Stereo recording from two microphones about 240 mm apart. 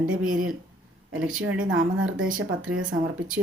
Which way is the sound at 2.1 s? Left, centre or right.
Right.